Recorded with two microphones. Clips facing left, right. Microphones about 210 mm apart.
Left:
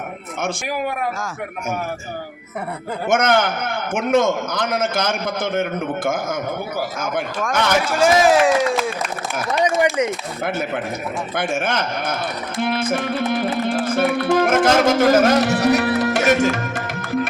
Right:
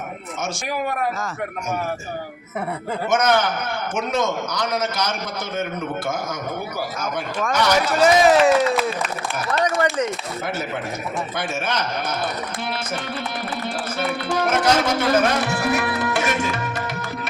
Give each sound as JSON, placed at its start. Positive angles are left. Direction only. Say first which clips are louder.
{"t": 3.1, "sound": "a man's voice", "louder": "left 2 dB", "side_deg": 55}
{"t": 7.9, "sound": "speech", "louder": "even", "side_deg": 0}
{"t": 9.5, "sound": "speech", "louder": "left 3 dB", "side_deg": 20}
{"t": 11.3, "sound": "a man's voice", "louder": "left 6 dB", "side_deg": 50}